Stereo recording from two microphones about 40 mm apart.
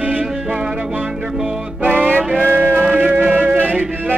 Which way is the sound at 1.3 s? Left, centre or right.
Centre.